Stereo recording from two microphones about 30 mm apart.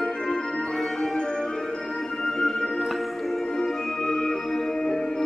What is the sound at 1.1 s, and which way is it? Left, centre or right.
Music, left.